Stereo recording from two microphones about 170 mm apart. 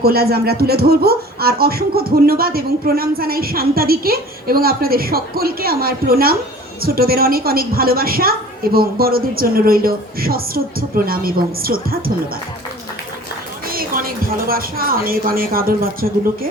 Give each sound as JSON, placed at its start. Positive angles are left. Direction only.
{"t": 0.0, "sound": "speech", "side_deg": -65}
{"t": 13.7, "sound": "speech", "side_deg": -60}